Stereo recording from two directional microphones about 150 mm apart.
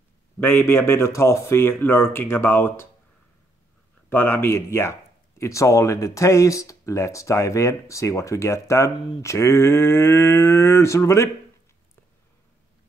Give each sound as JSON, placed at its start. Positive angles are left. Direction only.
{"t": 0.4, "sound": "speech", "side_deg": 15}
{"t": 4.1, "sound": "speech", "side_deg": 15}